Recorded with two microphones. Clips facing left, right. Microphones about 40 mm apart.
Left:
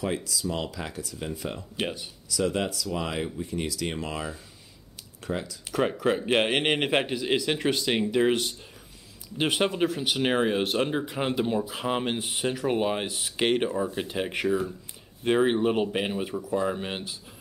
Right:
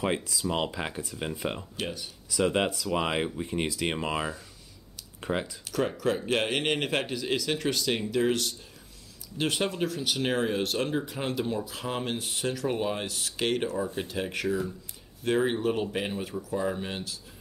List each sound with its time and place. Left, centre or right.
0.0 s speech: right
1.8 s speech: left
2.2 s speech: right
5.7 s speech: left